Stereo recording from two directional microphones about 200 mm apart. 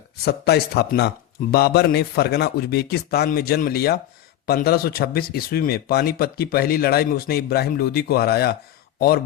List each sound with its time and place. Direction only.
0.3 s speech: 55° left (ahead or behind)